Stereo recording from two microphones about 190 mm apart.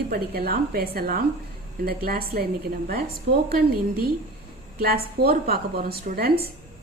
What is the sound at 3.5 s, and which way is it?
A woman's voice, 55° right (ahead or behind).